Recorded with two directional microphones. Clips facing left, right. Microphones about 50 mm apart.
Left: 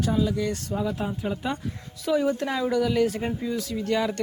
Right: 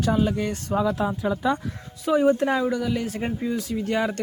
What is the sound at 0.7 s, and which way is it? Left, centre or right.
Speech, right.